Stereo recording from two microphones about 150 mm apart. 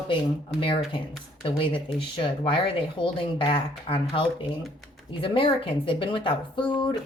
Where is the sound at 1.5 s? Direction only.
35° left (ahead or behind).